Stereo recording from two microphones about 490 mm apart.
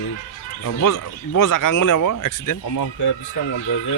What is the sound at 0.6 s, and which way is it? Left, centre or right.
Speech, left.